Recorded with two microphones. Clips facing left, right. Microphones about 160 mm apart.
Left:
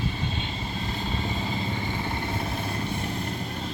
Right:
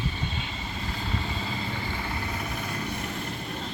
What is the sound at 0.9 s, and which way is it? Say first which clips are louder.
Vehicle: left 1 dB; 25° left (ahead or behind).